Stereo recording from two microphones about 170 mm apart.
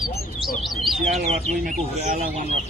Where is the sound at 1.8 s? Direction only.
40° right (ahead or behind).